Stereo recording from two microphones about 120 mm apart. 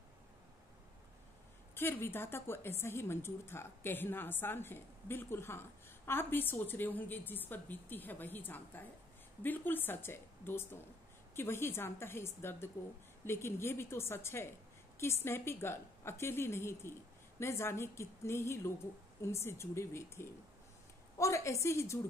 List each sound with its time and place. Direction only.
1.8 s a woman's voice: 20° left (ahead or behind)